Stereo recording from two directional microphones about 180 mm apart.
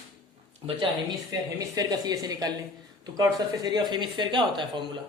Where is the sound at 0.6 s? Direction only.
25° right (ahead or behind).